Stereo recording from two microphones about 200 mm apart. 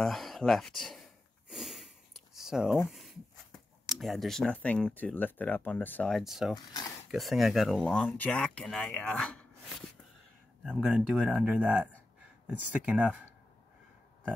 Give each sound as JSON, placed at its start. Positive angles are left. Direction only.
{"t": 0.0, "sound": "speech", "side_deg": 0}
{"t": 6.5, "sound": "speech", "side_deg": 20}
{"t": 7.1, "sound": "speech", "side_deg": 0}